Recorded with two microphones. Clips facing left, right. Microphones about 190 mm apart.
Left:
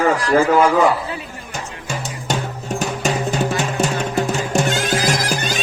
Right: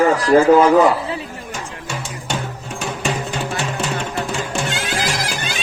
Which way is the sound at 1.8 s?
40° left (ahead or behind).